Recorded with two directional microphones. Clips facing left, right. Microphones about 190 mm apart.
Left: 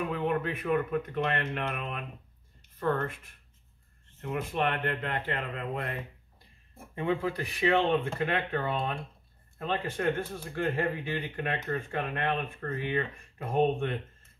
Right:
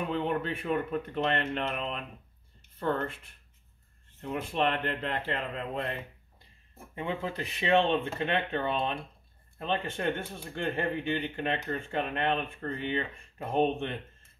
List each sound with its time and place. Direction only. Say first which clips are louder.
0.1 s speech: even; 30° right (ahead or behind)
4.3 s speech: right 1 dB; 30° right (ahead or behind)
7.0 s speech: left 4 dB; 20° right (ahead or behind)